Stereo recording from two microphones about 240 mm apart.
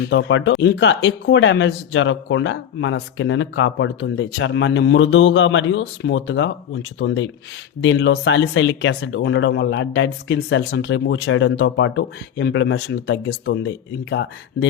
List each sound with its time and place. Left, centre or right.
0.0 s speech: left